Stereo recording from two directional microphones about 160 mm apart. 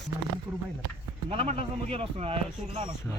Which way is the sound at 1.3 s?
40° right (ahead or behind).